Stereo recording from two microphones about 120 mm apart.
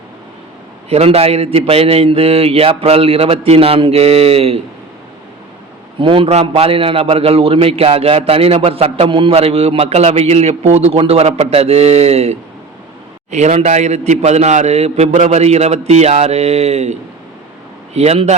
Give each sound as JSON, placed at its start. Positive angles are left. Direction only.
{"t": 0.9, "sound": "a man's voice", "side_deg": -60}
{"t": 6.0, "sound": "a man's voice", "side_deg": -45}
{"t": 6.2, "sound": "a man's voice", "side_deg": -60}
{"t": 13.3, "sound": "a man's voice", "side_deg": -70}